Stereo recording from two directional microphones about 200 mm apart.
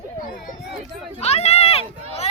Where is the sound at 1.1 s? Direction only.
30° left (ahead or behind).